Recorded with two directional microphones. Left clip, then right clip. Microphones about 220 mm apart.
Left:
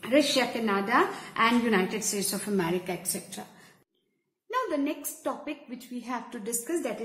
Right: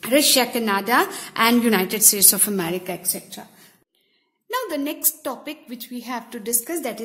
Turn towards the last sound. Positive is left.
turn(degrees=-40)  # may be behind; listen again after turning